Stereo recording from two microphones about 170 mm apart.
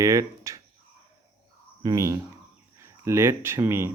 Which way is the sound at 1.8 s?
20° right (ahead or behind).